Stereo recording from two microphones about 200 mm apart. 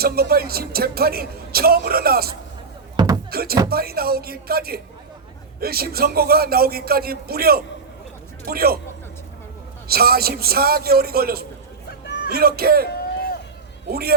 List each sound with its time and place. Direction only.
0.0 s speech: 50° right (ahead or behind)
2.9 s a sound: 20° right (ahead or behind)
3.2 s speech: 50° right (ahead or behind)
9.9 s speech: 50° right (ahead or behind)
12.9 s a sound: 50° left (ahead or behind)
13.9 s speech: 50° right (ahead or behind)